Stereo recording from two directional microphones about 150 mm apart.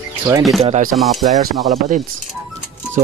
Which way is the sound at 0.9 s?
Centre (ahead or behind).